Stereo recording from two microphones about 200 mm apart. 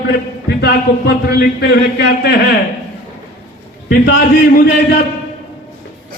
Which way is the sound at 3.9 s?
55° left (ahead or behind).